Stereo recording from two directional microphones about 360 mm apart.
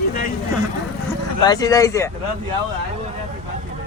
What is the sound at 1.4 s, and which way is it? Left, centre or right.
Speech, centre.